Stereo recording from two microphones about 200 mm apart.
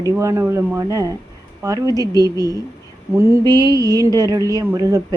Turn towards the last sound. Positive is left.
turn(degrees=-20)  # may be behind; listen again after turning